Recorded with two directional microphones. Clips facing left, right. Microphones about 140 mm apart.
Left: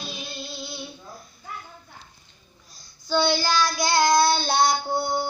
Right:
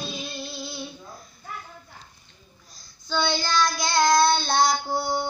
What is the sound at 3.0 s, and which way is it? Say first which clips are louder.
Child singing: left 4 dB; 10° left (ahead or behind).